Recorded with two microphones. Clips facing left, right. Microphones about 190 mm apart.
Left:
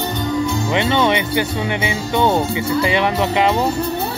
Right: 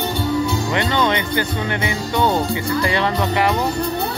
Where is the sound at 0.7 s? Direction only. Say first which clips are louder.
Left 4 dB; 20° left (ahead or behind).